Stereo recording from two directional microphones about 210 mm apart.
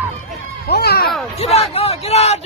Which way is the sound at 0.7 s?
50° left (ahead or behind).